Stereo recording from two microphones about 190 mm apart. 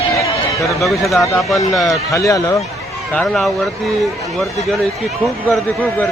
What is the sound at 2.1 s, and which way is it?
Speech, 15° left (ahead or behind).